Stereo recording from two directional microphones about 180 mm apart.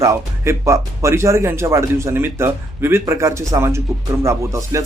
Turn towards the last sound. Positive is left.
turn(degrees=-15)  # may be behind; listen again after turning